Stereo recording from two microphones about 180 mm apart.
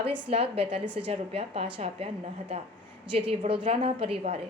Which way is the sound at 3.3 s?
30° right (ahead or behind).